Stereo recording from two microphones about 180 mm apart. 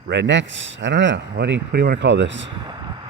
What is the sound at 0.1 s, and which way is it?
Speech, 85° right.